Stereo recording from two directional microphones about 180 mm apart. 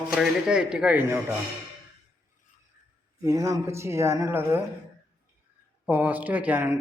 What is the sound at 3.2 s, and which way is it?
Speech, 15° right (ahead or behind).